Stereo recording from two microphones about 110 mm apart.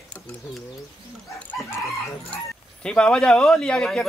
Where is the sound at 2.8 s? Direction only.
10° left (ahead or behind).